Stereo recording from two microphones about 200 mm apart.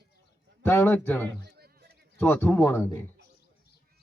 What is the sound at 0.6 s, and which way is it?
Speech, 10° left (ahead or behind).